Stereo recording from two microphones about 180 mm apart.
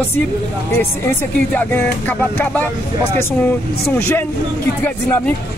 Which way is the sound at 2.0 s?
10° left (ahead or behind).